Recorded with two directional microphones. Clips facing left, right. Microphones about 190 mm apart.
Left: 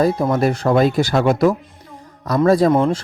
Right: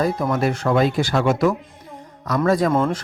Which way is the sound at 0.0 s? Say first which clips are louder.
Left 4 dB; 35° left (ahead or behind).